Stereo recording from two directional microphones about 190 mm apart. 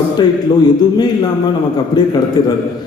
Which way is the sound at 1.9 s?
20° left (ahead or behind).